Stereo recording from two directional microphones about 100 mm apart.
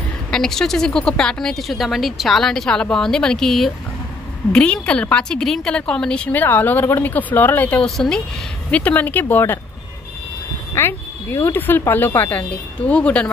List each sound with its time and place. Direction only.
0.3 s a woman's voice: 5° left (ahead or behind); by 9.6 s 25° left (ahead or behind)
10.7 s a woman's voice: 25° left (ahead or behind)